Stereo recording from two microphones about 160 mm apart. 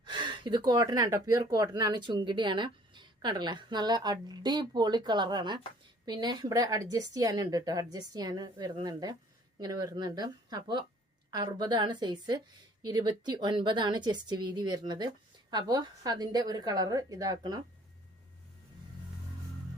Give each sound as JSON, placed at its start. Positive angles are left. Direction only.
{"t": 0.0, "sound": "speech", "side_deg": -30}